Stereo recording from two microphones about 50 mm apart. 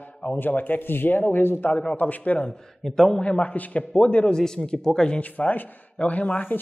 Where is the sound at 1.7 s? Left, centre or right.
Centre.